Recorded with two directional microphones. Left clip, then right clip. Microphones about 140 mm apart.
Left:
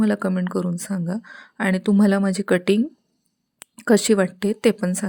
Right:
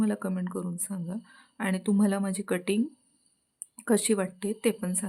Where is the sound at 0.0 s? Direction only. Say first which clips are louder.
Left 9 dB; 45° left (ahead or behind).